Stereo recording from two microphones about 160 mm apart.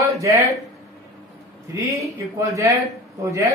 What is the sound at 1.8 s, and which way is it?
Speech, 20° right (ahead or behind).